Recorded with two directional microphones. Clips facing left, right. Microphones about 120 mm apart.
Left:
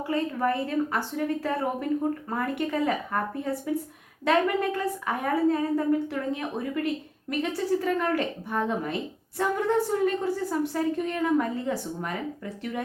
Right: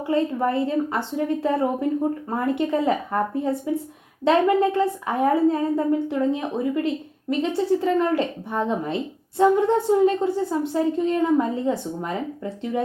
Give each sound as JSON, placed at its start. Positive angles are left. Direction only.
{"t": 0.1, "sound": "a woman's voice", "side_deg": -25}